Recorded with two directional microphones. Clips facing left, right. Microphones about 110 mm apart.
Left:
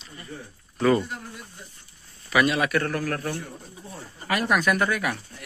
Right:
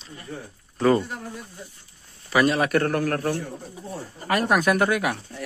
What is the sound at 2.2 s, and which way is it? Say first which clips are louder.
A man's voice: right 2 dB; 35° right (ahead or behind).